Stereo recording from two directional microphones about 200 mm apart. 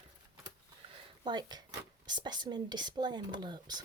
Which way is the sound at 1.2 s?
20° right (ahead or behind).